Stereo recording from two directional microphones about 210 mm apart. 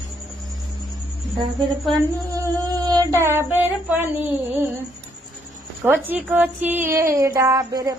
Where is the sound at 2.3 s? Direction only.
15° right (ahead or behind).